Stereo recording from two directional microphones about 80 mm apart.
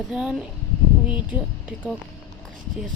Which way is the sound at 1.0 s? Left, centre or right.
Centre.